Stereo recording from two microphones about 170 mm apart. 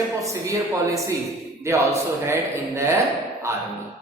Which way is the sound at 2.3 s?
15° right (ahead or behind).